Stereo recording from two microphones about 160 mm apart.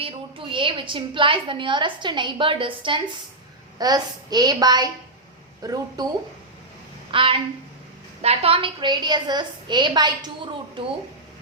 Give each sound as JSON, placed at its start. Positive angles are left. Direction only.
{"t": 0.0, "sound": "a woman's voice", "side_deg": -35}
{"t": 7.1, "sound": "a woman's voice", "side_deg": -35}